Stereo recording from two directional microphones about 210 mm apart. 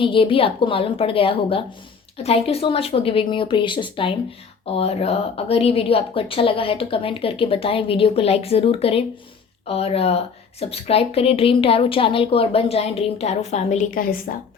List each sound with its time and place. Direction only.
0.0 s speech: 25° left (ahead or behind); by 14.3 s 40° left (ahead or behind)